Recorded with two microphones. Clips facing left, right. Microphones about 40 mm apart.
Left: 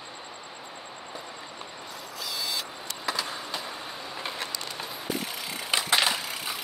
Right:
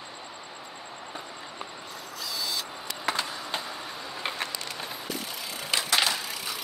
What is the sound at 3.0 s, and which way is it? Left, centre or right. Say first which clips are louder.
Vehicle: right 1 dB; right.